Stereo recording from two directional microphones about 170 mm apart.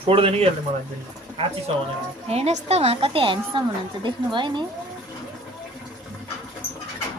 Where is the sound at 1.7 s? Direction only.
35° right (ahead or behind).